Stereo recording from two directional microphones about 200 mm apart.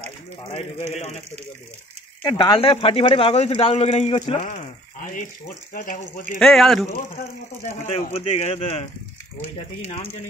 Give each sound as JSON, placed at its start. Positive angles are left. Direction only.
{"t": 2.2, "sound": "speech", "side_deg": 20}
{"t": 6.3, "sound": "speech", "side_deg": 0}
{"t": 7.6, "sound": "speech", "side_deg": 35}